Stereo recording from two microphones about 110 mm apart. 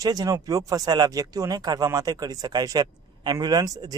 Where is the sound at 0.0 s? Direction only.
35° right (ahead or behind).